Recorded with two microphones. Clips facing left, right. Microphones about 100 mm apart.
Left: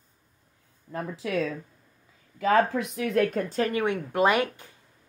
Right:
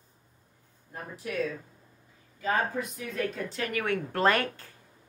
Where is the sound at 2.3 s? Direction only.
90° left; by 3.8 s 35° left (ahead or behind).